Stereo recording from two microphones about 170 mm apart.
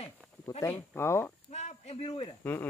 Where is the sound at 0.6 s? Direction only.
10° left (ahead or behind).